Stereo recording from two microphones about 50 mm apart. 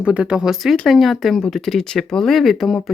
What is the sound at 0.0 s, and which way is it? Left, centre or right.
Speech, right.